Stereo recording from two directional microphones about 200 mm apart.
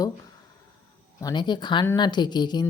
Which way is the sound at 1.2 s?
20° left (ahead or behind).